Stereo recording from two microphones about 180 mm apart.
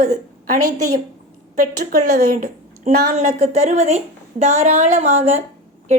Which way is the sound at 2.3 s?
45° right (ahead or behind).